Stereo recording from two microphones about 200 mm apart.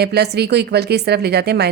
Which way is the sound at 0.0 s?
55° right (ahead or behind).